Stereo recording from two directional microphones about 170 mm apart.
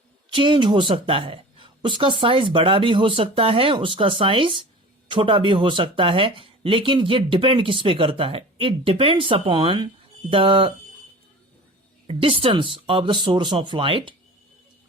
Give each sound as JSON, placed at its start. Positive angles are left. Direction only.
{"t": 0.3, "sound": "speech", "side_deg": -30}
{"t": 12.0, "sound": "speech", "side_deg": -35}